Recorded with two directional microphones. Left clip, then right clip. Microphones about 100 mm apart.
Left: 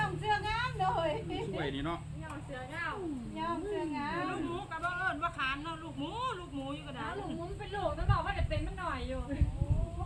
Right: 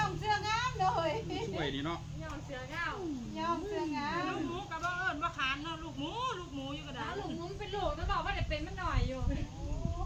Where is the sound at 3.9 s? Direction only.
45° right (ahead or behind).